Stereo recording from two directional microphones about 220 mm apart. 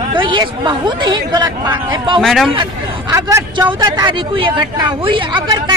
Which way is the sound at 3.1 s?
15° right (ahead or behind).